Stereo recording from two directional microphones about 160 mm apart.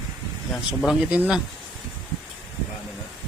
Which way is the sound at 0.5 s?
Centre (ahead or behind).